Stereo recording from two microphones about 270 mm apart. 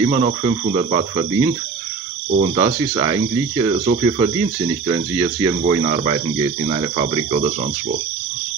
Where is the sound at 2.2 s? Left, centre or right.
Right.